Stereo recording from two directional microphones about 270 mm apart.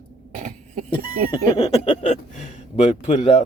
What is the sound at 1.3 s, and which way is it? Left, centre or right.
Speech, left.